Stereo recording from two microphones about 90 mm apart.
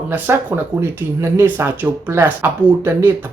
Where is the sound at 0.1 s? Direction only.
25° right (ahead or behind).